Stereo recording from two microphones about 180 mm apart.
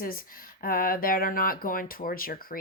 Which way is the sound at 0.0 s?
55° left (ahead or behind).